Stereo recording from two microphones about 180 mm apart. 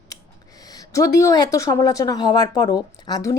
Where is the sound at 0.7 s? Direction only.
20° left (ahead or behind).